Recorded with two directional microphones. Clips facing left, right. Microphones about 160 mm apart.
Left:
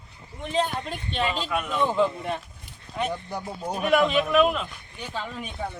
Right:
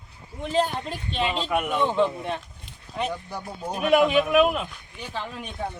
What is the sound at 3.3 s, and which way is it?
Speech, 15° left (ahead or behind).